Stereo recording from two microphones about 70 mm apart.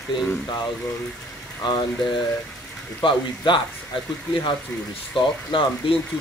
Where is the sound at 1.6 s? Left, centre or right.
Left.